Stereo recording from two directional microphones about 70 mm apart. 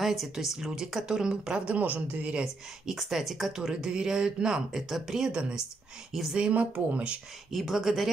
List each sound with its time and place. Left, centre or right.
0.0 s speech: centre
1.8 s speech: right
2.4 s speech: centre
7.5 s speech: centre